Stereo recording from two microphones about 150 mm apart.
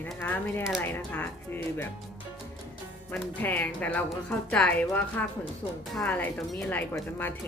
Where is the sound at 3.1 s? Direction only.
10° left (ahead or behind).